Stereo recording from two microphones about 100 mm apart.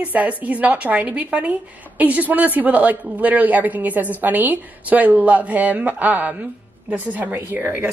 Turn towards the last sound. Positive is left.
turn(degrees=-20)  # may be behind; listen again after turning